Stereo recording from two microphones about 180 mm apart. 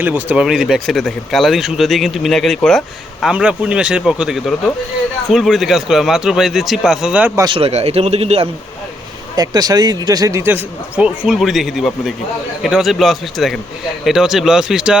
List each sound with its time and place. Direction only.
0.0 s speech: 10° right (ahead or behind)
7.4 s a man's voice: 30° right (ahead or behind)
9.3 s a man's voice: 20° right (ahead or behind); by 14.9 s 5° right (ahead or behind)